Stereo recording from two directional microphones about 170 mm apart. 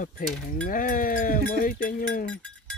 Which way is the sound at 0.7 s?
55° left (ahead or behind).